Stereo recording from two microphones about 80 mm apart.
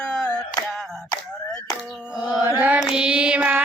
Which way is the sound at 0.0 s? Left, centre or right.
Centre.